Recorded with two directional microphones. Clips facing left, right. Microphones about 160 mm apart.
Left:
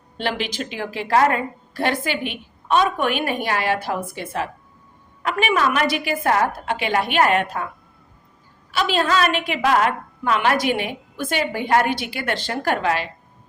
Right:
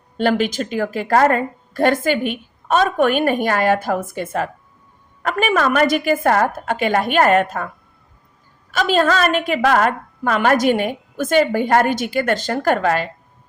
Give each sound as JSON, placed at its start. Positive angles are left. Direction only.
{"t": 0.2, "sound": "a woman's voice", "side_deg": -45}
{"t": 8.7, "sound": "a woman's voice", "side_deg": -45}